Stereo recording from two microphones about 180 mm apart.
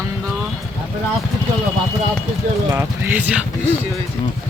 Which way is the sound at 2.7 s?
10° right (ahead or behind).